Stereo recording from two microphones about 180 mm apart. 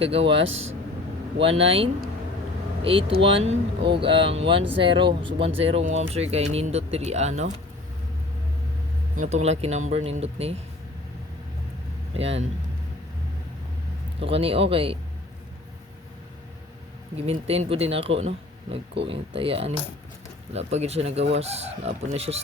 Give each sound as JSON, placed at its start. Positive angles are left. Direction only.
{"t": 0.0, "sound": "speech", "side_deg": -30}
{"t": 0.4, "sound": "speech", "side_deg": -90}
{"t": 1.4, "sound": "speech", "side_deg": -30}
{"t": 9.1, "sound": "speech", "side_deg": -40}
{"t": 12.1, "sound": "speech", "side_deg": -35}
{"t": 14.2, "sound": "speech", "side_deg": -30}
{"t": 17.2, "sound": "speech", "side_deg": -35}